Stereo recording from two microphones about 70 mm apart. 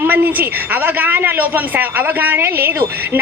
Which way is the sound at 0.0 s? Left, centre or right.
Right.